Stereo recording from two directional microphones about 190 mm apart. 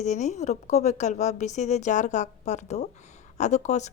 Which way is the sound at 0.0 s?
40° left (ahead or behind).